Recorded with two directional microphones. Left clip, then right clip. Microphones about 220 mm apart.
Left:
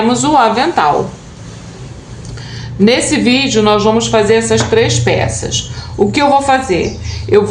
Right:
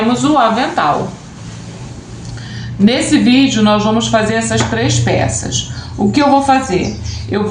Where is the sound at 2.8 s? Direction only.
40° left (ahead or behind).